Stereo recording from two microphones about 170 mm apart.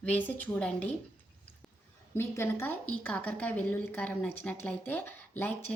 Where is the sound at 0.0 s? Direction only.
10° left (ahead or behind).